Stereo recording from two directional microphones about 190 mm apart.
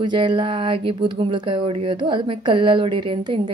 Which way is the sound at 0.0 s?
25° right (ahead or behind).